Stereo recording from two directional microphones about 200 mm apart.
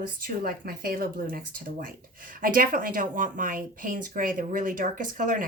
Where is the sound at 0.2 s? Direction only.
50° right (ahead or behind).